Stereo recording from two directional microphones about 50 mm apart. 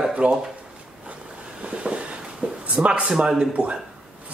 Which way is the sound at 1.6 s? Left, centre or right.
Right.